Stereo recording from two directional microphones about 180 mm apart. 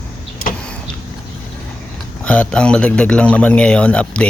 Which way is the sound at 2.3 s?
5° left (ahead or behind).